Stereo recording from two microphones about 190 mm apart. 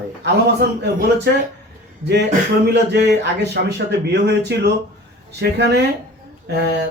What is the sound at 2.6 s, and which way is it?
A man's voice, 65° right (ahead or behind).